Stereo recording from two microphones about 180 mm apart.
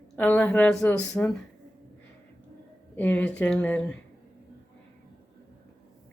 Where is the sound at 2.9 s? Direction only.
10° left (ahead or behind).